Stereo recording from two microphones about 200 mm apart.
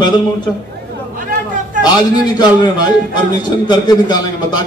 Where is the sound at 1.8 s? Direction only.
20° left (ahead or behind).